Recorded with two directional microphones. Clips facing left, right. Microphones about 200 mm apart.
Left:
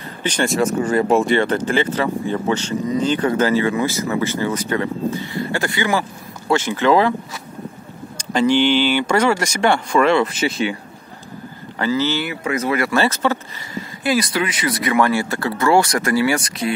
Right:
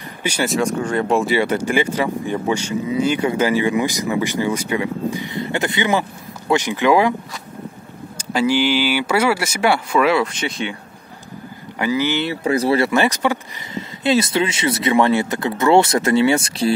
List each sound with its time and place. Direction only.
0.2 s speech: 5° right (ahead or behind)
8.2 s speech: 5° right (ahead or behind)
11.8 s speech: 15° right (ahead or behind)
12.3 s speech: 35° right (ahead or behind)
12.9 s speech: 15° right (ahead or behind)